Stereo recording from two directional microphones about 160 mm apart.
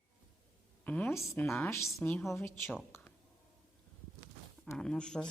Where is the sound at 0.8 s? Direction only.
10° left (ahead or behind).